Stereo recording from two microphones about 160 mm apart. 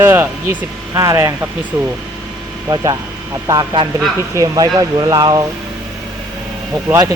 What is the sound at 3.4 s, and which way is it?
Speech, 25° right (ahead or behind).